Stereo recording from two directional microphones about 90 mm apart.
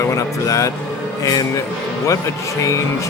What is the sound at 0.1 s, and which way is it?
Speech, 35° left (ahead or behind).